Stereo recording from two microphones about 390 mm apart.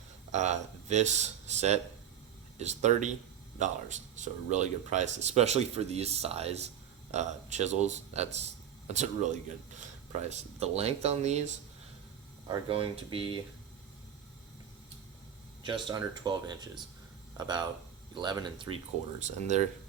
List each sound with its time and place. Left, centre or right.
0.3 s speech: centre
12.5 s speech: centre
15.6 s speech: centre